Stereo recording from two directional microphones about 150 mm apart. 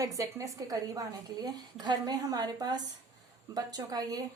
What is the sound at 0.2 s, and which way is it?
A woman's voice, 20° right (ahead or behind).